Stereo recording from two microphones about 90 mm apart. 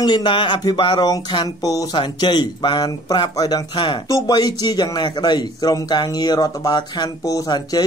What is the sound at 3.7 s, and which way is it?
Speech, 60° left (ahead or behind).